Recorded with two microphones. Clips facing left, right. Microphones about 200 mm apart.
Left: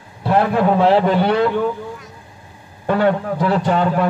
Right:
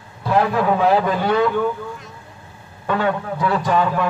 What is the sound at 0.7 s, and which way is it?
Speech, 30° left (ahead or behind).